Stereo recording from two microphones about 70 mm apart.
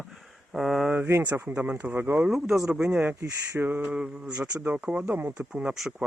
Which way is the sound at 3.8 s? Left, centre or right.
Centre.